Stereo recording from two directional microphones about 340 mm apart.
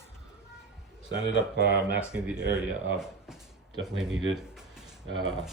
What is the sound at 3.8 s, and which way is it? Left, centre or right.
Speech, right.